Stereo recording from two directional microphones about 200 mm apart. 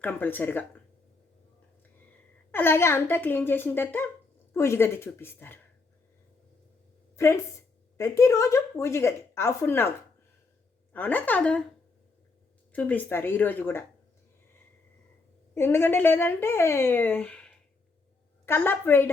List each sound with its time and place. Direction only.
0.0 s a woman's voice: 10° left (ahead or behind)
2.5 s a woman's voice: 10° left (ahead or behind)
7.2 s a woman's voice: 15° left (ahead or behind)
10.9 s a woman's voice: 10° left (ahead or behind)
12.7 s a woman's voice: 10° left (ahead or behind)
15.5 s a woman's voice: 10° left (ahead or behind)